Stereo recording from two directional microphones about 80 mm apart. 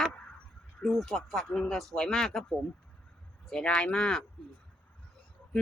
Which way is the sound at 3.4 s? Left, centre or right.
Centre.